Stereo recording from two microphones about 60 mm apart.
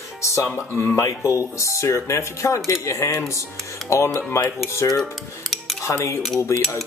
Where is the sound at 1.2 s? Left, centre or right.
Left.